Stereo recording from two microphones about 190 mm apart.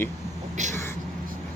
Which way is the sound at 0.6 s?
40° right (ahead or behind).